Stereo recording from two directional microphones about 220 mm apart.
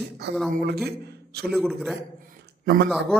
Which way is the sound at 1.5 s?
Centre (ahead or behind).